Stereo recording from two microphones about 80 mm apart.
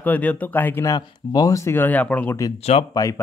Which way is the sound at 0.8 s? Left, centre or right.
Left.